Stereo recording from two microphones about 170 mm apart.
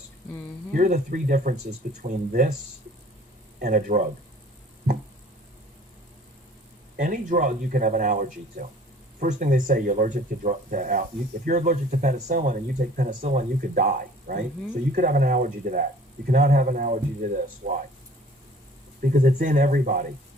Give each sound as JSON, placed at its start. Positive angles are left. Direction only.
{"t": 0.7, "sound": "speech", "side_deg": -50}
{"t": 3.6, "sound": "speech", "side_deg": -50}
{"t": 6.9, "sound": "speech", "side_deg": -55}
{"t": 19.1, "sound": "speech", "side_deg": -50}